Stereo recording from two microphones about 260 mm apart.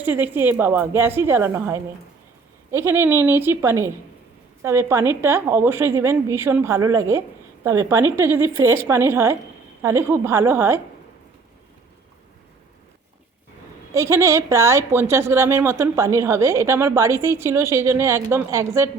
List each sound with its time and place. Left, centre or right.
0.0 s a woman's voice: centre
13.9 s a woman's voice: centre